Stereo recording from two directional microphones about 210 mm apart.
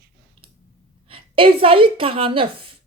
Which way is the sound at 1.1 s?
25° right (ahead or behind).